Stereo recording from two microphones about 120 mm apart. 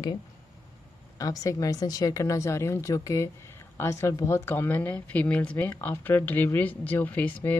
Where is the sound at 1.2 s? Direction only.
30° left (ahead or behind).